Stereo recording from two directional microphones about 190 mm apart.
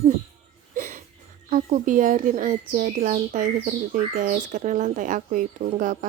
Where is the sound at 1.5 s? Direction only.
45° right (ahead or behind).